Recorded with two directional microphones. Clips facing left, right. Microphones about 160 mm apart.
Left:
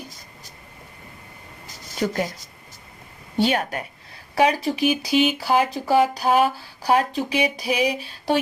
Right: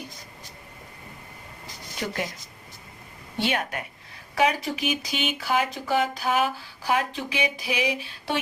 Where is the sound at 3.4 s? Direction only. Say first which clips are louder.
Left 6 dB; 35° left (ahead or behind).